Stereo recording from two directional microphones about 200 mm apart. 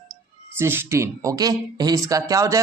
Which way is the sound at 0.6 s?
10° right (ahead or behind).